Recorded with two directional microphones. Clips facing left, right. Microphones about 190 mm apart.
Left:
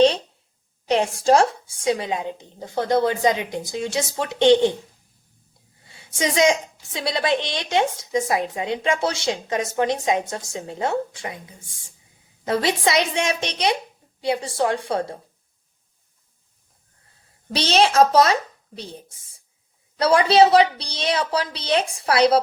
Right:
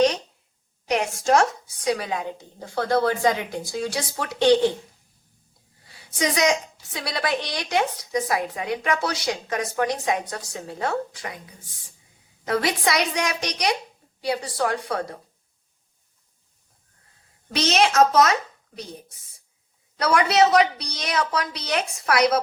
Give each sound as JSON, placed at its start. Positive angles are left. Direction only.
{"t": 0.9, "sound": "a woman's voice", "side_deg": 30}
{"t": 5.8, "sound": "a woman's voice", "side_deg": 25}
{"t": 17.5, "sound": "a child's voice", "side_deg": 30}